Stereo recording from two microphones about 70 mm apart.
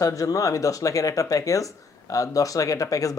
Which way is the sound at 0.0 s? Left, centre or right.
Left.